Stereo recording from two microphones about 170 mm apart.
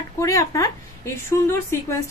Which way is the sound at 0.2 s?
20° left (ahead or behind).